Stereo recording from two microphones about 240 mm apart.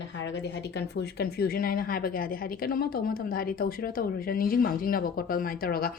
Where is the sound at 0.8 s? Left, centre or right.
Left.